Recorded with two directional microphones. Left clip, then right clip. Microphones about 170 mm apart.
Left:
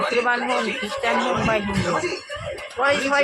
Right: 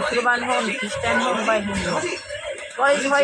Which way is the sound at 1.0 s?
35° left (ahead or behind).